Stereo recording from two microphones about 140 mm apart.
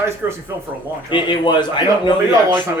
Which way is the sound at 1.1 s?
35° left (ahead or behind).